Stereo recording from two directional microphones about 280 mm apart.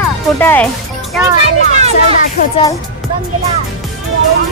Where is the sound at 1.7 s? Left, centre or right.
Right.